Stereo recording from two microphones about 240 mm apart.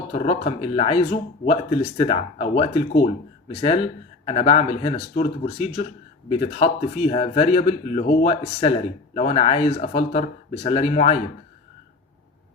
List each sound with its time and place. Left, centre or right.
0.1 s a man's voice: left